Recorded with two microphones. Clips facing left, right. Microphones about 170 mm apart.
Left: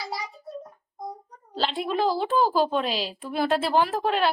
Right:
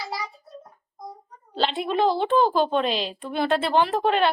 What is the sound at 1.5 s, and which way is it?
A woman's voice, centre (ahead or behind).